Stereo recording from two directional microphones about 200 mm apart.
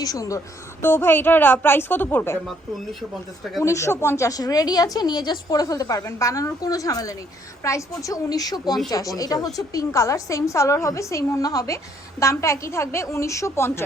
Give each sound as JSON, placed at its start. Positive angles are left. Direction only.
{"t": 0.0, "sound": "a woman's voice", "side_deg": 15}
{"t": 3.6, "sound": "a woman's voice", "side_deg": 15}